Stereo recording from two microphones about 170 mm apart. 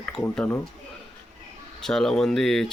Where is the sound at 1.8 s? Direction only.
5° left (ahead or behind).